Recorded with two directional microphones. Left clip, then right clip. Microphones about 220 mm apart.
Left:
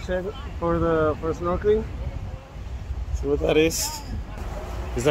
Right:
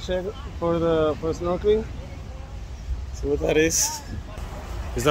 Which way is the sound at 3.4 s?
5° left (ahead or behind).